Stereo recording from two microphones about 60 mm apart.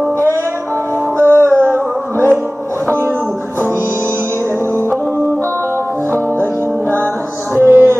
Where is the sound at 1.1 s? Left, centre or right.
Right.